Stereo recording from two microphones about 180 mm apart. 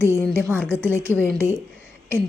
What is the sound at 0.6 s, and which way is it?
Speech, 10° right (ahead or behind).